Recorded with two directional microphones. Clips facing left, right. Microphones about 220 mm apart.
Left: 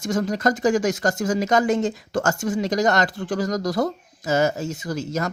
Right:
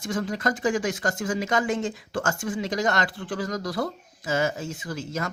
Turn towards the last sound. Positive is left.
turn(degrees=40)  # may be behind; listen again after turning